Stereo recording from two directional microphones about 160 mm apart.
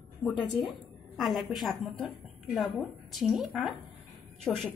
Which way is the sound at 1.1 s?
Centre (ahead or behind).